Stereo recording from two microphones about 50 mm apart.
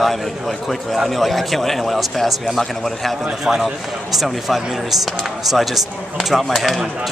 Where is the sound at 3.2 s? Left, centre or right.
Centre.